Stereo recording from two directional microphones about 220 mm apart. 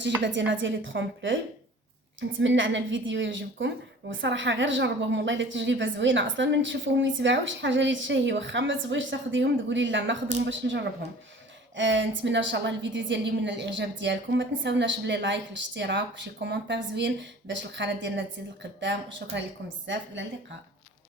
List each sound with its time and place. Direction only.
0.2 s a woman's voice: 55° right (ahead or behind)
2.4 s a woman's voice: 55° right (ahead or behind)